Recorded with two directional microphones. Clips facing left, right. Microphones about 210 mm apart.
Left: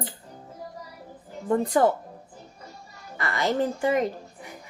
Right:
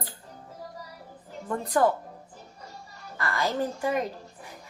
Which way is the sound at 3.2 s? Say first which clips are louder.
Left 3 dB; 20° left (ahead or behind).